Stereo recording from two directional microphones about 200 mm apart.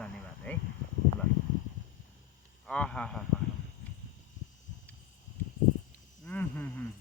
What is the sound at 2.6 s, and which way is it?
Speech, 5° left (ahead or behind).